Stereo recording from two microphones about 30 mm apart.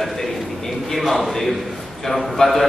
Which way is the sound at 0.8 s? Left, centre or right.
Centre.